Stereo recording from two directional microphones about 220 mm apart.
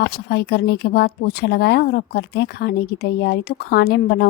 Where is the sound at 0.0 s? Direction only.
45° left (ahead or behind).